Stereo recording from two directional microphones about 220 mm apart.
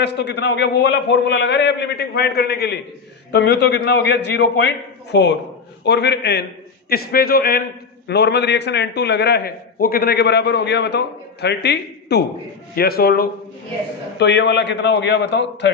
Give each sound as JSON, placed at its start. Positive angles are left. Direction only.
{"t": 0.0, "sound": "a man's voice", "side_deg": 50}